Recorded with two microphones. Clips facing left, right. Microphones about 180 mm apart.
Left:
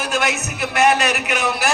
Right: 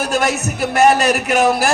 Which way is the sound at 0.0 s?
45° right (ahead or behind).